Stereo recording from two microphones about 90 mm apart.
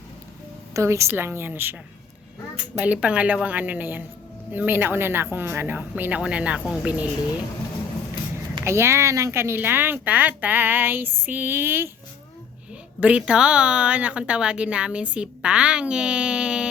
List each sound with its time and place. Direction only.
0.7 s speech: 35° right (ahead or behind)
2.7 s a woman's voice: 15° right (ahead or behind)
8.6 s speech: 30° right (ahead or behind)
13.0 s a woman's voice: 15° right (ahead or behind)